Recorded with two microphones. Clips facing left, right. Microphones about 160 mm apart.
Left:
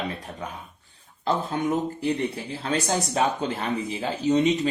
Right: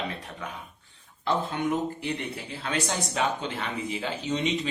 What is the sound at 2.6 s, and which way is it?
Speech, 35° left (ahead or behind).